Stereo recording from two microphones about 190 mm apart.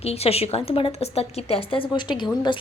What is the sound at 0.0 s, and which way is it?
A woman's voice, 30° left (ahead or behind).